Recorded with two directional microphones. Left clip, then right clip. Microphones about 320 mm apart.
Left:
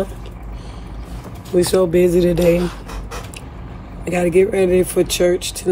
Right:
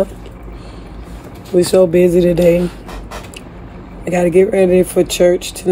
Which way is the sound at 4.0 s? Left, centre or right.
Centre.